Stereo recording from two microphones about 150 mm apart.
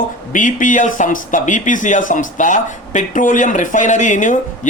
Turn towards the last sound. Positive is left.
turn(degrees=55)  # may be behind; listen again after turning